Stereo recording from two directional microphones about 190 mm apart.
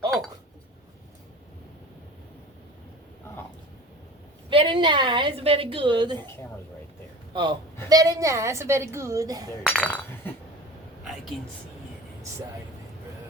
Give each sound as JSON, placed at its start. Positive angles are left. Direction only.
{"t": 4.4, "sound": "a woman's voice", "side_deg": -25}
{"t": 7.3, "sound": "a woman's voice", "side_deg": -20}
{"t": 9.6, "sound": "speech", "side_deg": 5}